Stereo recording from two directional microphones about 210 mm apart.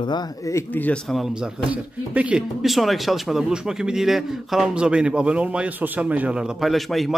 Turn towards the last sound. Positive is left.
turn(degrees=0)  # may be behind; listen again after turning